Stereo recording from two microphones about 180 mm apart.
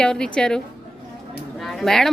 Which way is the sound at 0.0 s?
5° left (ahead or behind).